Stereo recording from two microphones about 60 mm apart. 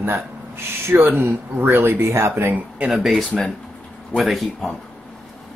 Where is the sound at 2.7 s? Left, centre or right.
Centre.